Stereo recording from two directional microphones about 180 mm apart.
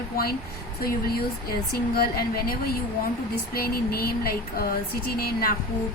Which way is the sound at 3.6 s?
60° left (ahead or behind).